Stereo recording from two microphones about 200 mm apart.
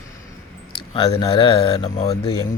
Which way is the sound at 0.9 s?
25° left (ahead or behind).